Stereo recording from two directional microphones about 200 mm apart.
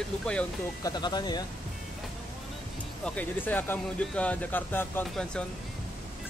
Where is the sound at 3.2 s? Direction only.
10° left (ahead or behind).